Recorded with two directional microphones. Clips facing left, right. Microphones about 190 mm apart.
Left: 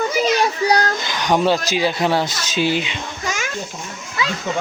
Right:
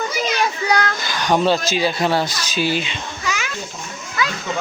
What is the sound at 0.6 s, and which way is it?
Speech, 35° left (ahead or behind).